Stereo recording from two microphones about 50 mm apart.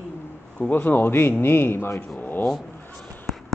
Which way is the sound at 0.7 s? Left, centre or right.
Left.